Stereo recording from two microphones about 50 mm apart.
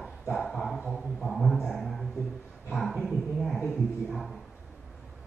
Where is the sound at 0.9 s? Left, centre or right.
Centre.